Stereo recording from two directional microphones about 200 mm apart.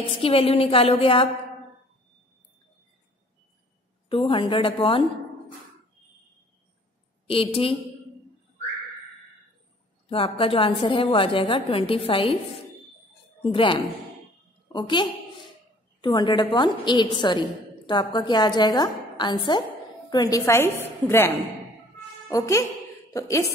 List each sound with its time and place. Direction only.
0.2 s a woman's voice: 30° left (ahead or behind)
4.1 s a woman's voice: 25° left (ahead or behind)
7.2 s a woman's voice: 25° left (ahead or behind)
10.0 s a woman's voice: 25° left (ahead or behind)
13.4 s a woman's voice: 25° left (ahead or behind)
22.3 s a woman's voice: 15° left (ahead or behind)